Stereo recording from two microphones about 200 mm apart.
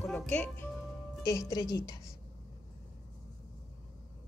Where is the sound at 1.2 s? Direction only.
15° left (ahead or behind).